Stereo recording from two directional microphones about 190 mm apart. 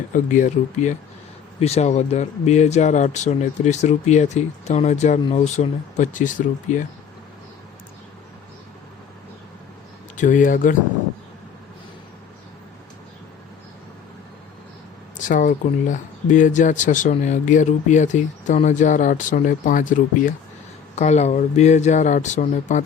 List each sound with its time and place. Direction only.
0.1 s speech: 45° left (ahead or behind)
10.2 s speech: 45° left (ahead or behind)
15.3 s speech: 40° left (ahead or behind)